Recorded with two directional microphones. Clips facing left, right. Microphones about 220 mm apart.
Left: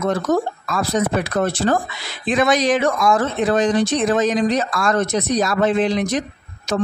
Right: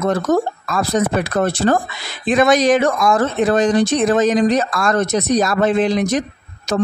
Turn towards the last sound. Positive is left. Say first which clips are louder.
# right 4 dB
turn(degrees=-45)  # may be behind; listen again after turning